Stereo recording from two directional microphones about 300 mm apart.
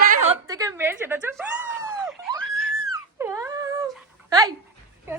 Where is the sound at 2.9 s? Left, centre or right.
Centre.